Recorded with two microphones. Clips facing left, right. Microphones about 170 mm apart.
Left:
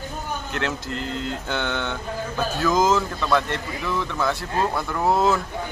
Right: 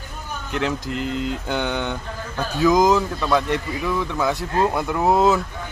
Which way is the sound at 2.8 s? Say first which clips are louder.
Right 3 dB; centre (ahead or behind).